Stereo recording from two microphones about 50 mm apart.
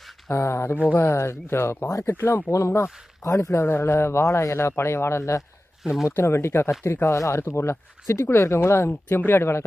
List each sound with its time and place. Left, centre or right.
0.3 s speech: left
3.6 s speech: left
5.8 s speech: centre
6.1 s speech: left
9.0 s speech: left